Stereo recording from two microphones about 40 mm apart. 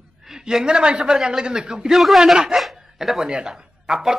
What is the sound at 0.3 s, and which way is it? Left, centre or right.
A man's voice, centre.